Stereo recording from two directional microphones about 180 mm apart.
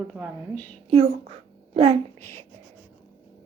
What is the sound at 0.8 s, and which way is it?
A woman's voice, 35° right (ahead or behind).